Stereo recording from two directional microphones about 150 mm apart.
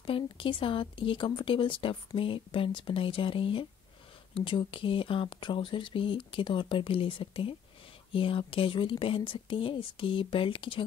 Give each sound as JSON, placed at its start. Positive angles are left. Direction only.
{"t": 0.0, "sound": "speech", "side_deg": 35}